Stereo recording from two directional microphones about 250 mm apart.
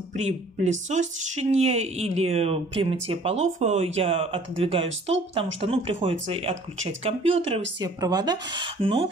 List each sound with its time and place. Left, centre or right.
0.2 s speech: right